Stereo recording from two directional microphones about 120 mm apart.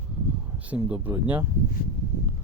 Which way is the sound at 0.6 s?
10° right (ahead or behind).